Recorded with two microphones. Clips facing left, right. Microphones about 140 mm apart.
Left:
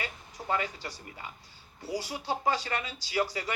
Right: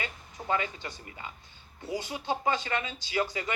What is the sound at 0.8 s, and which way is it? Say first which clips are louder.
Speech: even; 20° right (ahead or behind).